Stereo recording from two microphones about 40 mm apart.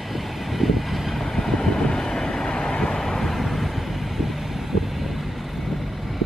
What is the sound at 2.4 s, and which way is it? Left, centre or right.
Vehicle, left.